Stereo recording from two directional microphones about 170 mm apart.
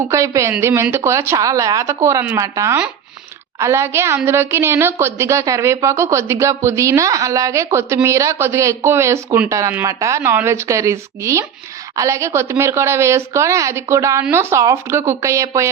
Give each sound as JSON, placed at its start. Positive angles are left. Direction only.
{"t": 0.1, "sound": "a woman's voice", "side_deg": -15}